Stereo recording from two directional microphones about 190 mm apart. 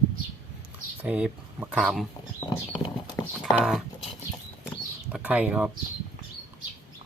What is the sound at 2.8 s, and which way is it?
Clip-clop, 25° left (ahead or behind).